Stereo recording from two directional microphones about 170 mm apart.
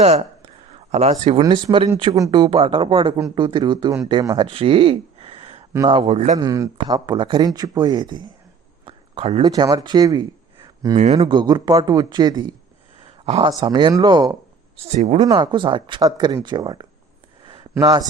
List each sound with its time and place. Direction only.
0.0 s a sound: 35° right (ahead or behind)
1.4 s a man's voice: 25° right (ahead or behind); by 6.4 s 45° right (ahead or behind)
6.4 s speech: 20° right (ahead or behind)
8.8 s a sound: 30° right (ahead or behind)
9.4 s speech: 20° right (ahead or behind)
10.9 s a man's voice: 45° right (ahead or behind)
11.3 s speech: 25° right (ahead or behind)
13.1 s a sound: 40° right (ahead or behind)
13.5 s speech: 25° right (ahead or behind)
14.8 s speech: 40° right (ahead or behind)
15.3 s speech: 30° right (ahead or behind)
17.4 s a sound: 25° right (ahead or behind)